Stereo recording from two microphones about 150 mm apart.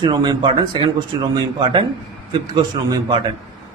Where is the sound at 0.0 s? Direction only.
30° right (ahead or behind).